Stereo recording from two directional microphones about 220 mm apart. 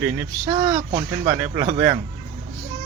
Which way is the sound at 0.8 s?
35° right (ahead or behind).